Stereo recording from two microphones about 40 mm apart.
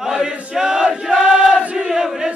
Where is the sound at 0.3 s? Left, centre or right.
Right.